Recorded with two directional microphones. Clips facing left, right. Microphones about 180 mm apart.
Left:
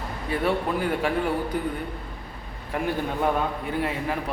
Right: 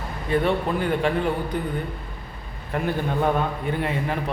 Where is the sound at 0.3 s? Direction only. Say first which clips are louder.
Right 3 dB; 5° left (ahead or behind).